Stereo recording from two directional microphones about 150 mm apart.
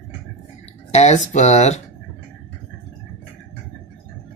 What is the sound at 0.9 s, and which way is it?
Speech, 50° left (ahead or behind).